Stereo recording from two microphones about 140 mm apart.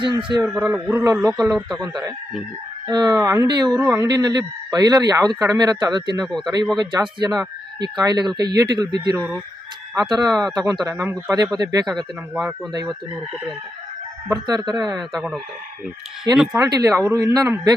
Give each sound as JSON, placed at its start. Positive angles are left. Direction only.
{"t": 0.0, "sound": "speech", "side_deg": -35}
{"t": 0.4, "sound": "a man's voice", "side_deg": -5}
{"t": 2.8, "sound": "speech", "side_deg": -30}
{"t": 3.8, "sound": "speech", "side_deg": -15}
{"t": 4.0, "sound": "speech", "side_deg": -30}
{"t": 6.2, "sound": "a man's voice", "side_deg": 0}
{"t": 6.7, "sound": "speech", "side_deg": -30}
{"t": 12.3, "sound": "speech", "side_deg": -10}
{"t": 14.3, "sound": "speech", "side_deg": -30}
{"t": 16.3, "sound": "a man's voice", "side_deg": 0}
{"t": 16.6, "sound": "speech", "side_deg": -25}